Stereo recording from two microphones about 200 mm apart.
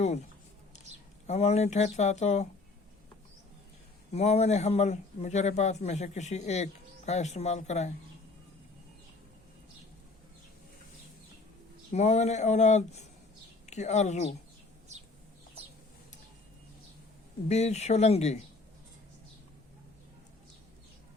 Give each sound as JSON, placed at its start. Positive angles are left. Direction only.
{"t": 1.3, "sound": "speech", "side_deg": 30}
{"t": 4.1, "sound": "speech", "side_deg": 30}
{"t": 11.9, "sound": "speech", "side_deg": 35}
{"t": 17.5, "sound": "speech", "side_deg": 35}